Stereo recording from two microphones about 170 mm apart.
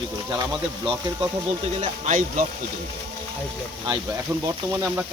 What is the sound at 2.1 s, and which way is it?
Speech, 50° right (ahead or behind).